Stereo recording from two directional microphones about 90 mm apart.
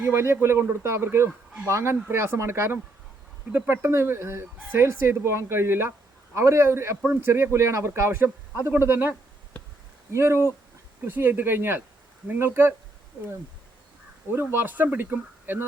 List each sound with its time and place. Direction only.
0.0 s speech: 30° right (ahead or behind)
14.5 s speech: 20° right (ahead or behind)